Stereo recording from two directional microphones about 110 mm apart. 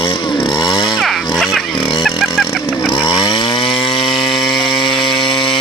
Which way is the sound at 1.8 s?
45° left (ahead or behind).